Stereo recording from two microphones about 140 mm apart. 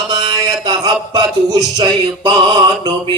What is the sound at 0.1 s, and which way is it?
Mantra, 35° right (ahead or behind).